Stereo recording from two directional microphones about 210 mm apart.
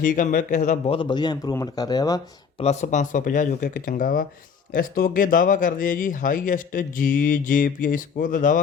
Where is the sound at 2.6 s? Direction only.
35° left (ahead or behind).